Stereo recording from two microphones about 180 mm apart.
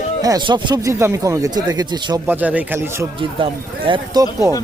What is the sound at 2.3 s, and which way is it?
Speech, 10° right (ahead or behind).